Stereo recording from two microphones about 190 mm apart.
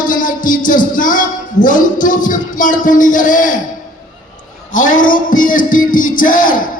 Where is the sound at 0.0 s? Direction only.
45° left (ahead or behind).